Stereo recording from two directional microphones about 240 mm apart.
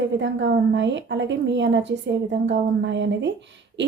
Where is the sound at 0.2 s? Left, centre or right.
Right.